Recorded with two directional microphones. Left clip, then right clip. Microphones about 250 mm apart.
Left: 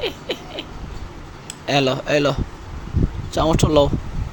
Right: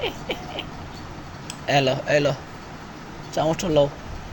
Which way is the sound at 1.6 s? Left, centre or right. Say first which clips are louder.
Left 1 dB; left.